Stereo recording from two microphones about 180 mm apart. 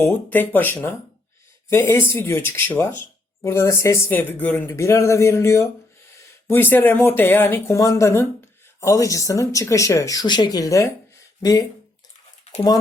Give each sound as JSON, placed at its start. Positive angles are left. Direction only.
{"t": 0.0, "sound": "speech", "side_deg": 10}
{"t": 1.9, "sound": "speech", "side_deg": 15}